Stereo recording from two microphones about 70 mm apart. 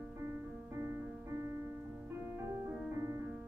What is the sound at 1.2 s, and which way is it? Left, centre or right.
Music, right.